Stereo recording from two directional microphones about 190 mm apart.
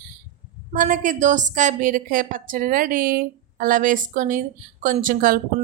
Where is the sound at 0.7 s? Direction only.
45° right (ahead or behind).